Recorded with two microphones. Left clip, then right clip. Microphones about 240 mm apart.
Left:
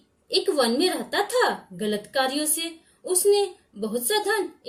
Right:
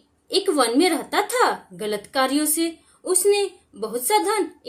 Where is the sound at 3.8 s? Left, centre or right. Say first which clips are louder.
Right 4 dB; right.